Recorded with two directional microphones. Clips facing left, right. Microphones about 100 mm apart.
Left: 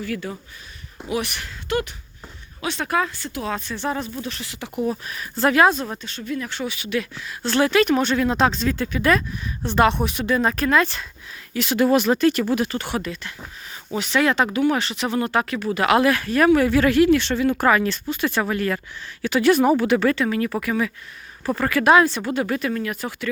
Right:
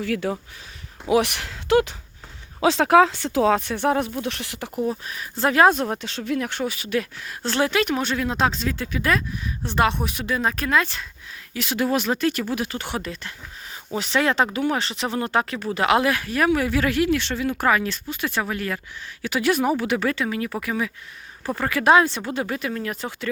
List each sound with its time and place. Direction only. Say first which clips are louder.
0.0 s speech: right 4 dB; 85° right; by 4.7 s 60° right (ahead or behind)
4.7 s speech: left 1 dB; 5° left (ahead or behind)
5.0 s speech: left 2 dB; 20° right (ahead or behind)
5.6 s speech: right 2 dB; 55° right (ahead or behind); by 6.5 s 85° right
6.5 s speech: right 1 dB; 45° right (ahead or behind)
7.5 s speech: left 4 dB; 20° right (ahead or behind)
7.9 s speech: left 4 dB; 5° right (ahead or behind)
12.7 s speech: left 3 dB; 20° right (ahead or behind)
13.0 s speech: left 2 dB; 35° right (ahead or behind)
22.8 s speech: left 2 dB; 30° right (ahead or behind)